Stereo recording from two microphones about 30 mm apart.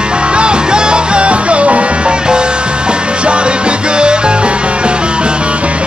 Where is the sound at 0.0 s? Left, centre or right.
Right.